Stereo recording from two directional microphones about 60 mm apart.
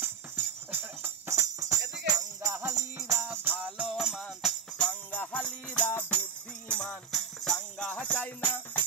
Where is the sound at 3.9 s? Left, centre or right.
Centre.